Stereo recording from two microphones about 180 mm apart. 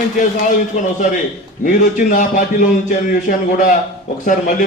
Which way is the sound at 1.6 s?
45° left (ahead or behind).